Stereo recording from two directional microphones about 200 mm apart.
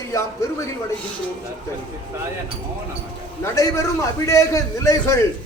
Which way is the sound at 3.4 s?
15° left (ahead or behind).